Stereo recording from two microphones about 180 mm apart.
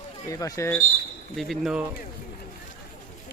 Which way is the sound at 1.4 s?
Centre (ahead or behind).